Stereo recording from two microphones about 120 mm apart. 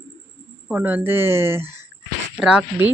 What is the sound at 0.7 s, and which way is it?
Speech, 15° right (ahead or behind).